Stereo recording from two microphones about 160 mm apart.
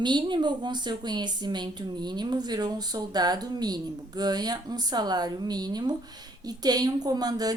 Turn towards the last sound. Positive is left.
turn(degrees=-25)  # may be behind; listen again after turning